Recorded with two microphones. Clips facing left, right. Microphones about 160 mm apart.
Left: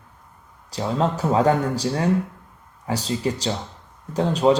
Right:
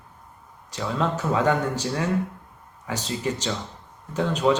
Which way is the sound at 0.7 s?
35° left (ahead or behind).